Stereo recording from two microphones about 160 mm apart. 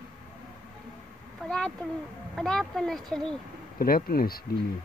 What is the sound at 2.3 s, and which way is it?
Speech, centre (ahead or behind).